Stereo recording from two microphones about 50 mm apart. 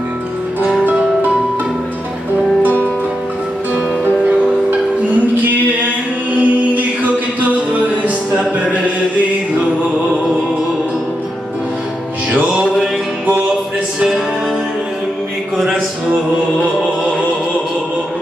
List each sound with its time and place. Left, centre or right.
5.4 s a sound: right
6.4 s mantra: right
8.0 s music: right
12.3 s music: centre
13.9 s music: centre